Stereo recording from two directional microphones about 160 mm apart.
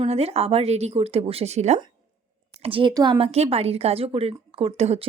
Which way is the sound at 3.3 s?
40° right (ahead or behind).